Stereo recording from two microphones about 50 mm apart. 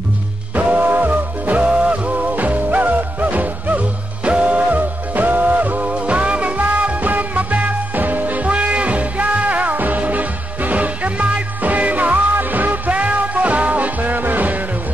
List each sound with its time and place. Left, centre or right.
0.6 s music: right
1.7 s music: centre
2.1 s music: right